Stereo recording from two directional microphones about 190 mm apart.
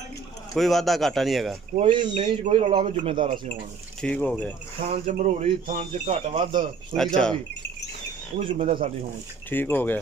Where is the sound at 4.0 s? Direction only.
5° left (ahead or behind).